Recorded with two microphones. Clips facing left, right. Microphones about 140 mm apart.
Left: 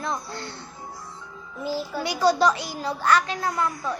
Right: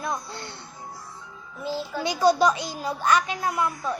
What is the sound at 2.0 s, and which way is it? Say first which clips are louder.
Speech: right 1 dB; 20° right (ahead or behind).